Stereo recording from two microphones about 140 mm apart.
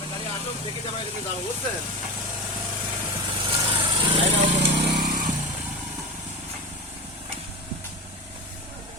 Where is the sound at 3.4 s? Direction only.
35° right (ahead or behind).